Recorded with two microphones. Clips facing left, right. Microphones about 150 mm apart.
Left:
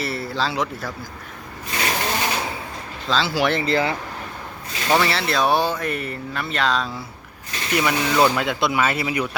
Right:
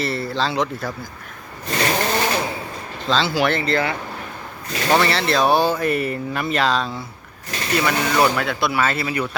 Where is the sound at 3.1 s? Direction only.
5° left (ahead or behind).